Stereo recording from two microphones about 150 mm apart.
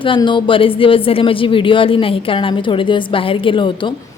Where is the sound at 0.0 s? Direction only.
35° left (ahead or behind).